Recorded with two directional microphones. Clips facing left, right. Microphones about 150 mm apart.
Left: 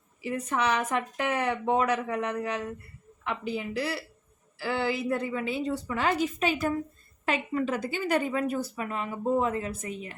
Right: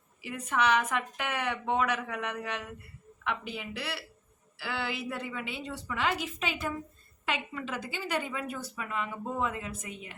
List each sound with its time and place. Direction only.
0.2 s a woman's voice: 35° left (ahead or behind)